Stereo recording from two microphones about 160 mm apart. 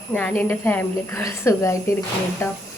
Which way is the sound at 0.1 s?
10° left (ahead or behind).